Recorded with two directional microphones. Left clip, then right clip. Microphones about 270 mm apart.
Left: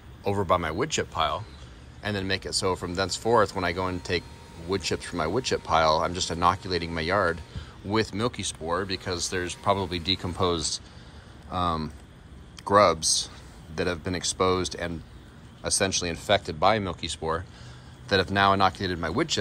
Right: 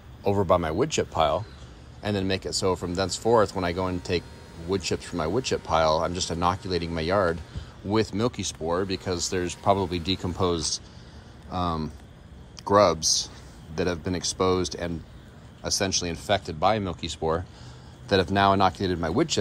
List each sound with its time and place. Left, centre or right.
0.2 s speech: centre